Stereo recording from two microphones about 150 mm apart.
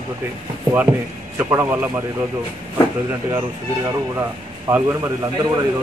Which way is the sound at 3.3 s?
25° right (ahead or behind).